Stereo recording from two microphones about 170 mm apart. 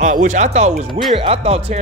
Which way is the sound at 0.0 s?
50° right (ahead or behind).